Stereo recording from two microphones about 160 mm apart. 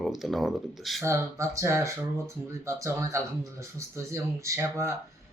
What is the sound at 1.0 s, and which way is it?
Speech, 20° right (ahead or behind).